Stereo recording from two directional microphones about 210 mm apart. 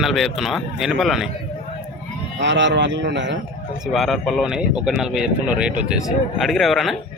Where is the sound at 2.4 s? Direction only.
60° right (ahead or behind).